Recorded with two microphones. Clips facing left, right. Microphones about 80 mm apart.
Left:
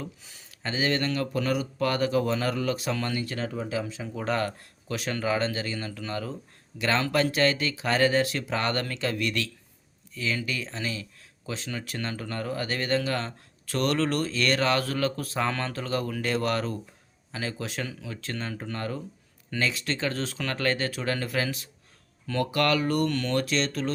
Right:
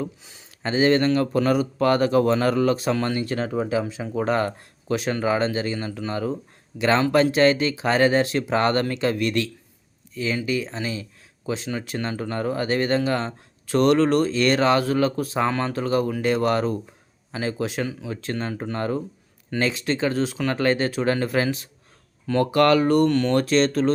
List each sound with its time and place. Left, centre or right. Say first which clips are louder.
0.0 s a man's voice: right 8 dB; right
3.4 s speech: right 7 dB; right
4.0 s a man's voice: right 4 dB; right